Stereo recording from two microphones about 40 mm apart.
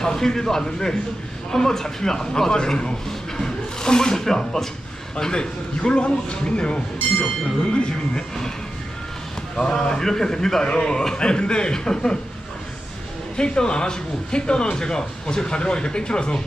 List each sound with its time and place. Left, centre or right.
0.0 s a man's voice: centre
9.6 s speech: centre
13.3 s speech: left